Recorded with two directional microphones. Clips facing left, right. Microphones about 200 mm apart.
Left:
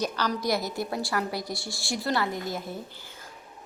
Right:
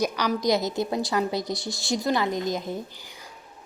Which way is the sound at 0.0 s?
10° right (ahead or behind).